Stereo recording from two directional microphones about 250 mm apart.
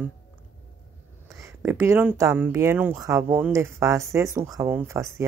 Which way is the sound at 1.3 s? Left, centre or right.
Centre.